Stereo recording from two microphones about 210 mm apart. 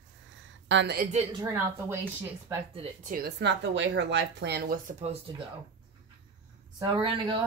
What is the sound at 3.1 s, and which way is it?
A woman's voice, 45° right (ahead or behind).